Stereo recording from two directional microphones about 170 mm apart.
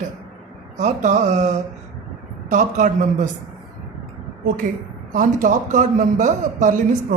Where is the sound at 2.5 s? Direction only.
45° right (ahead or behind).